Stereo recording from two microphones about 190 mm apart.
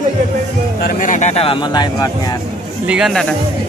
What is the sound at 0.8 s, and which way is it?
Speech, 45° left (ahead or behind).